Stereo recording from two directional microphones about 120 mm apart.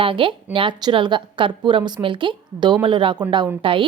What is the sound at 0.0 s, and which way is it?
A woman's voice, 45° right (ahead or behind).